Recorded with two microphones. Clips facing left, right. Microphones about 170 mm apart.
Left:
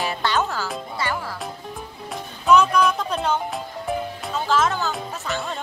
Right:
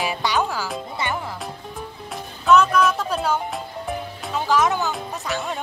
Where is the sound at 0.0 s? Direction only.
10° right (ahead or behind).